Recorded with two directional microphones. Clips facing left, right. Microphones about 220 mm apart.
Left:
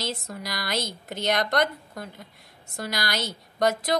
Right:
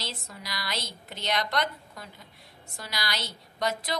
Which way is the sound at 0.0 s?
45° left (ahead or behind).